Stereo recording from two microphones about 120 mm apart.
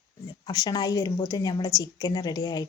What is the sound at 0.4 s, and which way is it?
A woman's voice, 35° left (ahead or behind).